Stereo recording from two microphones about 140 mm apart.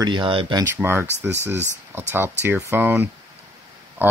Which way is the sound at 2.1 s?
15° right (ahead or behind).